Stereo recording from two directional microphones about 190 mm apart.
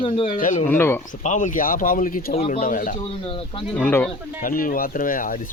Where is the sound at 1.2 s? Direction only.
40° left (ahead or behind).